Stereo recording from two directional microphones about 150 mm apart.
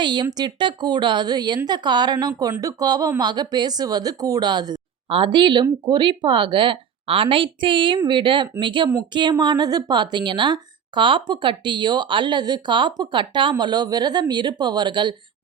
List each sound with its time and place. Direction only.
0.0 s a woman's voice: 30° right (ahead or behind)